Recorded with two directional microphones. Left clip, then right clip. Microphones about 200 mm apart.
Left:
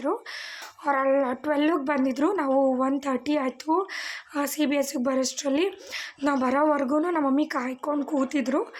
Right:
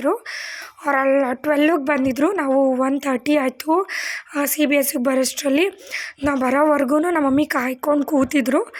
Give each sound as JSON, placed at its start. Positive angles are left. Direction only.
{"t": 0.9, "sound": "a woman's voice", "side_deg": -20}